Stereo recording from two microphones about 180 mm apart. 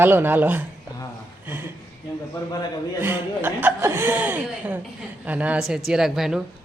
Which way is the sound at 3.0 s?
10° right (ahead or behind).